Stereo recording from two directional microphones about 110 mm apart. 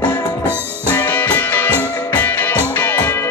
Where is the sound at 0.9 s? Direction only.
15° left (ahead or behind).